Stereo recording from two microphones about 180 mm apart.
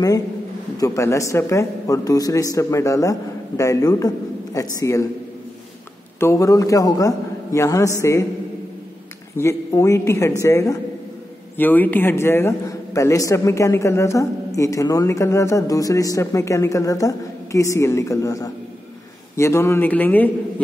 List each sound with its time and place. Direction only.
0.7 s a man's voice: 15° left (ahead or behind)
6.1 s a man's voice: 15° left (ahead or behind)
9.4 s a man's voice: 15° left (ahead or behind)